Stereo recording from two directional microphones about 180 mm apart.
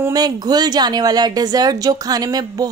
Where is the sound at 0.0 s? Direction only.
20° right (ahead or behind).